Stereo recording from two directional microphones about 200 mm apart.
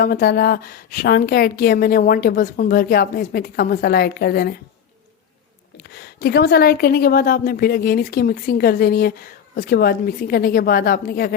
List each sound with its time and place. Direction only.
0.0 s a woman's voice: 50° left (ahead or behind)
5.9 s a woman's voice: 55° left (ahead or behind)